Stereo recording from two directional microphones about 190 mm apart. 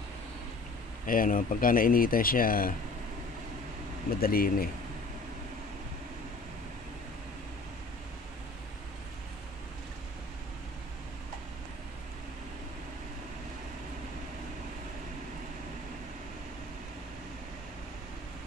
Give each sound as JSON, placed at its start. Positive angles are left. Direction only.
{"t": 1.0, "sound": "speech", "side_deg": 45}
{"t": 4.2, "sound": "speech", "side_deg": 50}